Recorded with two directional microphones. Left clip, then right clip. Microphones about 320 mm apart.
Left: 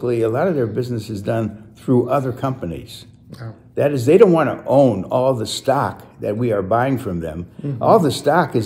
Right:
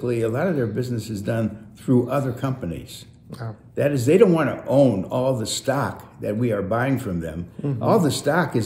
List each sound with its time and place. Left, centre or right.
0.0 s speech: centre